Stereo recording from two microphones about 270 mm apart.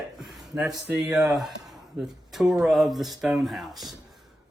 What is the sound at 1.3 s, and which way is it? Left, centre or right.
Speech, centre.